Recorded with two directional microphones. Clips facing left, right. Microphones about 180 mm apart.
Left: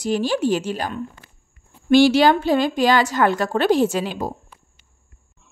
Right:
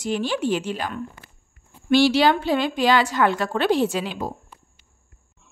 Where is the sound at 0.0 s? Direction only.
40° left (ahead or behind).